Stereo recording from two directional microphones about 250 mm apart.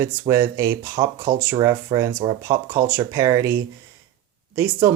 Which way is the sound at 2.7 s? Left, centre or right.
Centre.